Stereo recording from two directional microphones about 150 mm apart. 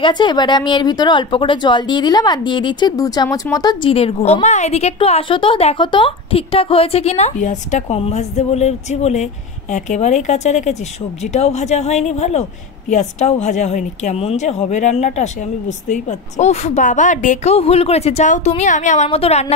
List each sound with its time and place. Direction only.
0.0 s speech: 30° left (ahead or behind)
3.9 s a woman's voice: 45° left (ahead or behind)
19.0 s a woman's voice: 40° left (ahead or behind)